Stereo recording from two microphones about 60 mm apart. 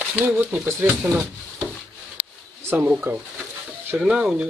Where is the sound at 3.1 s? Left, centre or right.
Right.